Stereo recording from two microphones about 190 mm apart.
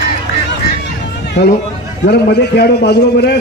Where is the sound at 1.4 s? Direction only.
65° left (ahead or behind).